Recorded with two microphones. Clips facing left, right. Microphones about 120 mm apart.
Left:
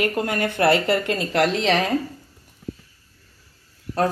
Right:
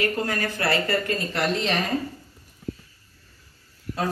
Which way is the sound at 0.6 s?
70° left (ahead or behind).